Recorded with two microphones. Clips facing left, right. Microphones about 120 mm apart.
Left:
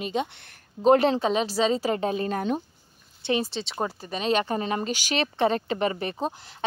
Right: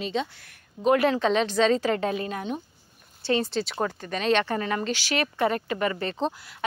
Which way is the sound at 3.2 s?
20° left (ahead or behind).